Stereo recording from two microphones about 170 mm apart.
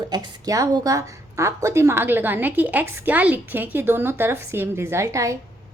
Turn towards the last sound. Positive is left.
turn(degrees=-20)  # may be behind; listen again after turning